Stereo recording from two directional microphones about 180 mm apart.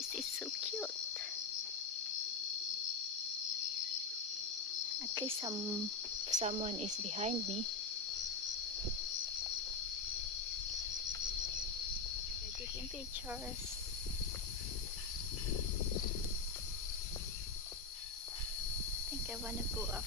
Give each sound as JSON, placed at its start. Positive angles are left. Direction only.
{"t": 0.1, "sound": "cricket", "side_deg": 0}
{"t": 5.1, "sound": "speech", "side_deg": -20}
{"t": 6.3, "sound": "speech", "side_deg": -35}